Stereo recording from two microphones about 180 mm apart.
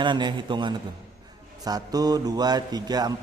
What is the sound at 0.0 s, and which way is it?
A man's voice, 25° right (ahead or behind).